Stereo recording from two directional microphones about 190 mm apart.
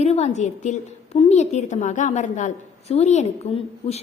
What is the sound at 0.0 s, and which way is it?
A woman's voice, 35° left (ahead or behind).